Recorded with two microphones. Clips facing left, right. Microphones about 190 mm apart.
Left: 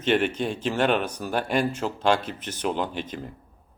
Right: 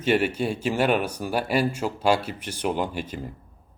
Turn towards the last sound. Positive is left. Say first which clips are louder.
# right 1 dB
turn(degrees=-5)  # may be behind; listen again after turning